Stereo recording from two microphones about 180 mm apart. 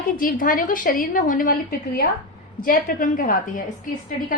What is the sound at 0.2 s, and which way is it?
A woman's voice, 50° left (ahead or behind).